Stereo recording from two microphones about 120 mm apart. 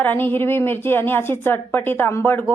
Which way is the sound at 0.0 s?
15° left (ahead or behind).